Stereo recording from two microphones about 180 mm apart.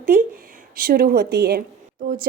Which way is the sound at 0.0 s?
50° right (ahead or behind).